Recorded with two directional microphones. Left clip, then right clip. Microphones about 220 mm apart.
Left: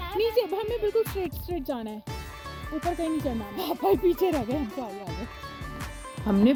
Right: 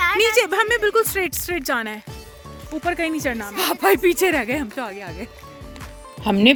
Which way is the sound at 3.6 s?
25° right (ahead or behind).